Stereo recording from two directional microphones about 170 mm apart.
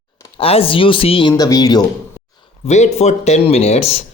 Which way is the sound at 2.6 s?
40° left (ahead or behind).